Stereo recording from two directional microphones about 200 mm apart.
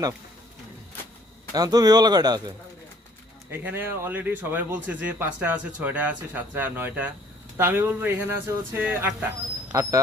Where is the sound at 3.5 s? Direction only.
10° right (ahead or behind).